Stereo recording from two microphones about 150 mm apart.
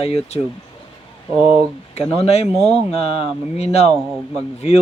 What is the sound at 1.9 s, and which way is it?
Speech, 45° left (ahead or behind).